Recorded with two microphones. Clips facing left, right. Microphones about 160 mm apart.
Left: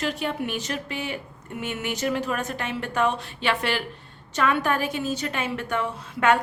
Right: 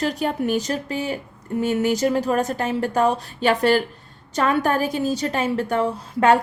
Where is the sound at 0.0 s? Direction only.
40° right (ahead or behind).